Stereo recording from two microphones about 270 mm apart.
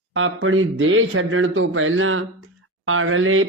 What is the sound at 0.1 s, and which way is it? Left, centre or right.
Speech, right.